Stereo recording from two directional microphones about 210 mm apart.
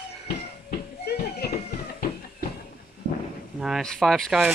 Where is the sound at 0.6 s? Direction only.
50° left (ahead or behind).